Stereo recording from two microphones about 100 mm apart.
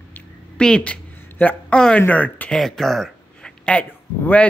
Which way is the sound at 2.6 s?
Centre (ahead or behind).